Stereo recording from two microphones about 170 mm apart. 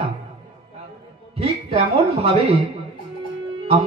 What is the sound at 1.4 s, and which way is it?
Speech, 35° right (ahead or behind).